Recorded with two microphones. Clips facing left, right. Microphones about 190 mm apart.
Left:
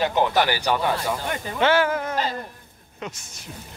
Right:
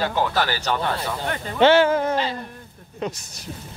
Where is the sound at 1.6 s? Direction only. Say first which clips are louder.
Right 5 dB; 25° right (ahead or behind).